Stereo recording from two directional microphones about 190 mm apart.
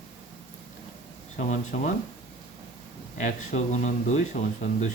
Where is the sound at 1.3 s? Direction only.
40° left (ahead or behind).